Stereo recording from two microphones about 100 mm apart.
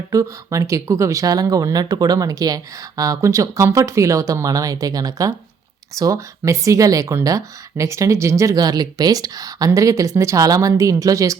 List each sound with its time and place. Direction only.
0.1 s speech: 30° right (ahead or behind)